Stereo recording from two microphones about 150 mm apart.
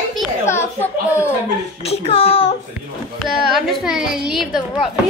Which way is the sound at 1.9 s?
40° left (ahead or behind).